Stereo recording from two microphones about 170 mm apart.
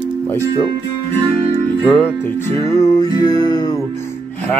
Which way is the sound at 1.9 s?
10° left (ahead or behind).